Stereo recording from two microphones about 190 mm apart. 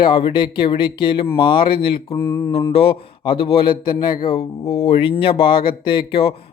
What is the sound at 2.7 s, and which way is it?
Speech, 30° left (ahead or behind).